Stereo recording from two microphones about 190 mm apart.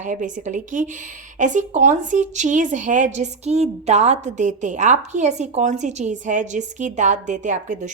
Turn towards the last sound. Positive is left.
turn(degrees=-40)  # may be behind; listen again after turning